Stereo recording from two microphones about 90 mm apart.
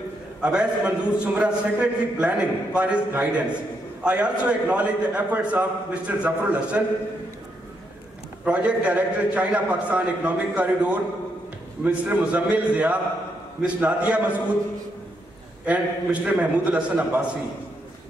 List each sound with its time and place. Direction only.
0.4 s a man's voice: 10° right (ahead or behind)
8.5 s a man's voice: 15° right (ahead or behind)
15.6 s a man's voice: 15° right (ahead or behind)